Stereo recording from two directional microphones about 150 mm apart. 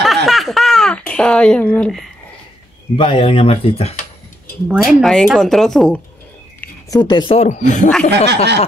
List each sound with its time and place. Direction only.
0.0 s a sound: centre (ahead or behind)
3.0 s speech: 35° left (ahead or behind)
4.6 s speech: centre (ahead or behind)
6.9 s speech: 30° left (ahead or behind)
7.3 s speech: 50° left (ahead or behind)